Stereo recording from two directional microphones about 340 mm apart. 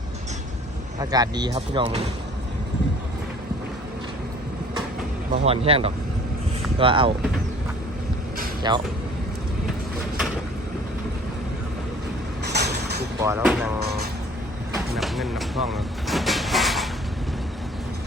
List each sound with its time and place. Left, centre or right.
0.9 s speech: centre
5.3 s speech: centre
8.7 s speech: centre
12.5 s vehicle: right
13.2 s speech: centre
14.9 s vehicle: centre